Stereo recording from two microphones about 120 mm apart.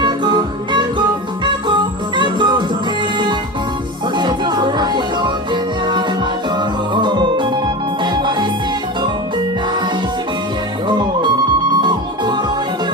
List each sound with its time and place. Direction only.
0.0 s music: 40° right (ahead or behind)
4.2 s music: 40° right (ahead or behind)
6.9 s organ: 40° right (ahead or behind)
8.0 s music: 40° right (ahead or behind)
11.8 s music: 40° right (ahead or behind)